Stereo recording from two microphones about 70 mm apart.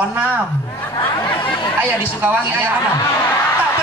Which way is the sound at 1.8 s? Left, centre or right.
Right.